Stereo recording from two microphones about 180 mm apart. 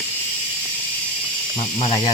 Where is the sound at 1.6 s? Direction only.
30° left (ahead or behind).